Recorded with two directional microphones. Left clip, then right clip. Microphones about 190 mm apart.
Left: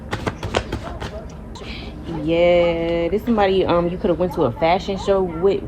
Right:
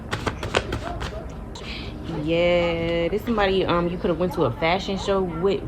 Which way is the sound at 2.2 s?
40° left (ahead or behind).